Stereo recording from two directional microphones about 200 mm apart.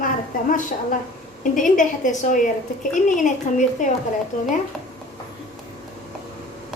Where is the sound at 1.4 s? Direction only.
40° left (ahead or behind).